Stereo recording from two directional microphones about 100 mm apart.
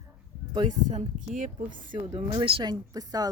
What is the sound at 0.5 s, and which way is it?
Speech, 50° right (ahead or behind).